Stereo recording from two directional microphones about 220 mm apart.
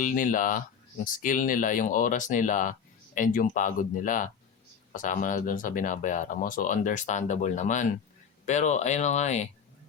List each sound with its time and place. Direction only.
0.0 s speech: 35° left (ahead or behind)